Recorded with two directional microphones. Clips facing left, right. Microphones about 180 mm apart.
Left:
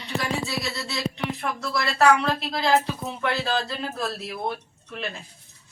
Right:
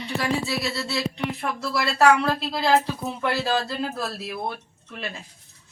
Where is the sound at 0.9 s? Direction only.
Centre (ahead or behind).